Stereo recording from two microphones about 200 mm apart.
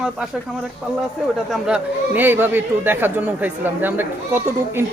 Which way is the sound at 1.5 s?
5° right (ahead or behind).